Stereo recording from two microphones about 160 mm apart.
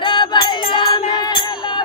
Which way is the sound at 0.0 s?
30° left (ahead or behind).